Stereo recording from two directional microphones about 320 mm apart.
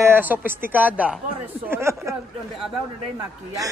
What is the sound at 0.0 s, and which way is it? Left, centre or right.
A man's voice, centre.